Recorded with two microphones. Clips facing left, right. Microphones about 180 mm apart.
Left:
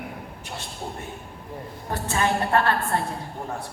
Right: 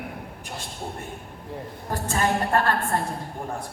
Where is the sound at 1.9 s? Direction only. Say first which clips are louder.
Even; 45° right (ahead or behind).